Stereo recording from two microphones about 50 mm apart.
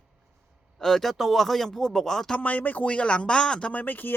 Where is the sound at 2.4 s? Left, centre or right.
Left.